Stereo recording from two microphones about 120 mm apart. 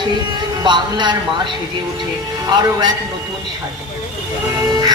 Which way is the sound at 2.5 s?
35° right (ahead or behind).